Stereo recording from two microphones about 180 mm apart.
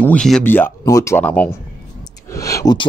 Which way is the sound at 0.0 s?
5° left (ahead or behind).